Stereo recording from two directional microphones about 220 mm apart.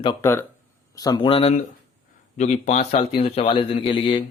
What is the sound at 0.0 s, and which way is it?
Speech, 20° left (ahead or behind).